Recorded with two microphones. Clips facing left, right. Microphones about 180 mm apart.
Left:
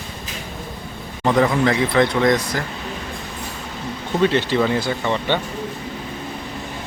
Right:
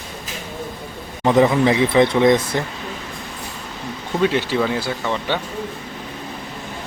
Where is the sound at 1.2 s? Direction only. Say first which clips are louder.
Right 2 dB; 20° right (ahead or behind).